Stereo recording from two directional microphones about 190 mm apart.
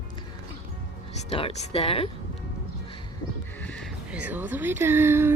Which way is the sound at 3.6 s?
5° left (ahead or behind).